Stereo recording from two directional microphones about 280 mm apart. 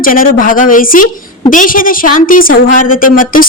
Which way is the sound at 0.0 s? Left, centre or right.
Left.